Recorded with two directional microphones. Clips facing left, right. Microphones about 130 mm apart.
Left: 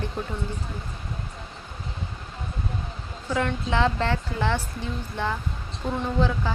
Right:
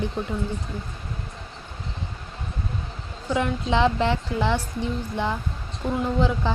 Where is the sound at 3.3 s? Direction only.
20° right (ahead or behind).